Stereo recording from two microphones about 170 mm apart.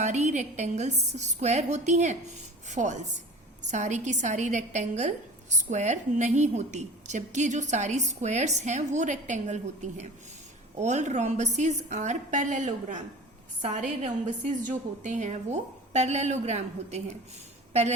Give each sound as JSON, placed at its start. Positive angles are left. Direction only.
{"t": 0.0, "sound": "a woman's voice", "side_deg": -45}